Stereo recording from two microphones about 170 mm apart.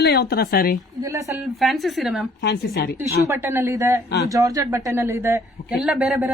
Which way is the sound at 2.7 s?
65° left (ahead or behind).